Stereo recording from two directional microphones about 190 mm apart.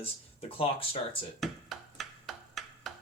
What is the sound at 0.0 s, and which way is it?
Speech, 30° left (ahead or behind).